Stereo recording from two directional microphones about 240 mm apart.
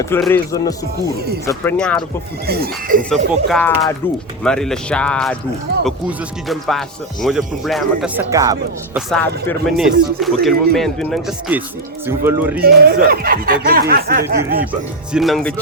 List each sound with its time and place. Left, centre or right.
0.2 s speech: centre
2.5 s speech: right
3.0 s speech: centre
9.0 s speech: centre
12.6 s speech: right
14.6 s speech: centre